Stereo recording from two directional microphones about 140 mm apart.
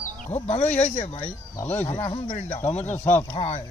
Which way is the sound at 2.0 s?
45° left (ahead or behind).